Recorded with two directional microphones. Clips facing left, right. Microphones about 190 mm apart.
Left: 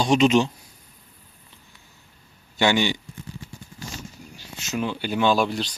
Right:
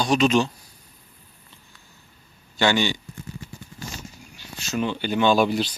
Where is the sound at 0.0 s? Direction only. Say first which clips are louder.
Left 2 dB; 25° left (ahead or behind).